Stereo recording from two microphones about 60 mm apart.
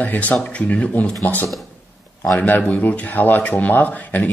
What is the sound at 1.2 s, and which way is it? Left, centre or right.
Speech, left.